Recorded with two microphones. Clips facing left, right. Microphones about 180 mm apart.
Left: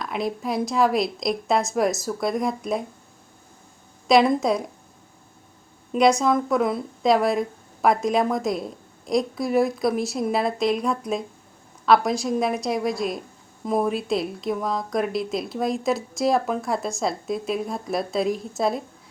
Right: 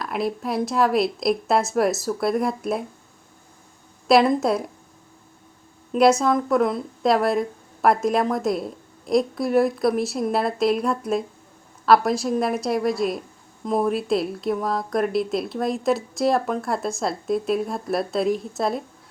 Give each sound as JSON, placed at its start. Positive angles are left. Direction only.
{"t": 0.0, "sound": "speech", "side_deg": 0}
{"t": 4.1, "sound": "speech", "side_deg": 0}
{"t": 5.9, "sound": "speech", "side_deg": -5}